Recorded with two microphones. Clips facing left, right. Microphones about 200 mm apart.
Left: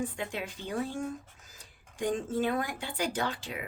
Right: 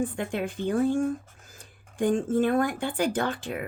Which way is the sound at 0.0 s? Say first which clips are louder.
Right 6 dB; 50° right (ahead or behind).